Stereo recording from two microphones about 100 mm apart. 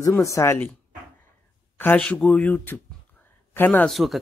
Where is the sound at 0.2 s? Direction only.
30° left (ahead or behind).